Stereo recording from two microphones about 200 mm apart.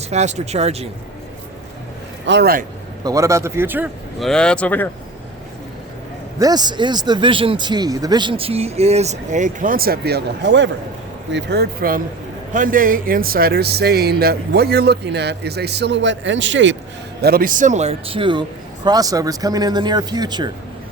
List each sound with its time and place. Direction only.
0.1 s speech: 35° right (ahead or behind)
2.2 s speech: 55° right (ahead or behind)
3.0 s a man's voice: 15° right (ahead or behind)
4.2 s speech: 5° left (ahead or behind)
6.4 s speech: 20° right (ahead or behind); by 16.7 s 65° right (ahead or behind)
17.2 s speech: 50° right (ahead or behind); by 20.5 s 20° right (ahead or behind)